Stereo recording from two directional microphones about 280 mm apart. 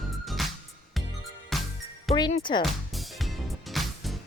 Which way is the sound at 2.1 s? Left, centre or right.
Centre.